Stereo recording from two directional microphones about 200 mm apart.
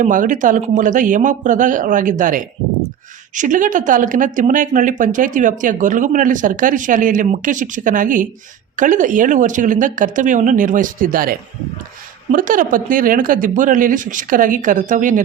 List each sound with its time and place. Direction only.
0.0 s speech: 40° right (ahead or behind)